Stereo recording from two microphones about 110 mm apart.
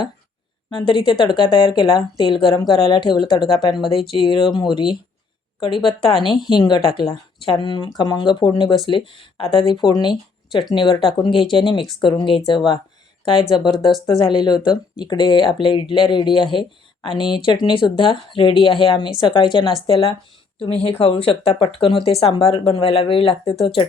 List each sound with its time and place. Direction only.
0.8 s speech: 45° left (ahead or behind)
5.8 s speech: 55° left (ahead or behind)
6.5 s speech: 45° left (ahead or behind)